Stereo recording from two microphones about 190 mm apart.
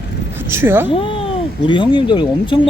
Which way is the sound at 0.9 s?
30° left (ahead or behind).